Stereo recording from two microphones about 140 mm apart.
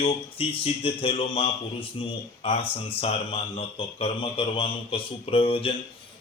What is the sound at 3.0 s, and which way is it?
Speech, 45° left (ahead or behind).